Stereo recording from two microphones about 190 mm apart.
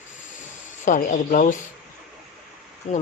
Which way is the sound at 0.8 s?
45° left (ahead or behind).